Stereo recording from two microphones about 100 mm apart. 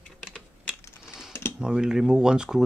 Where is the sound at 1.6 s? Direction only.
5° right (ahead or behind).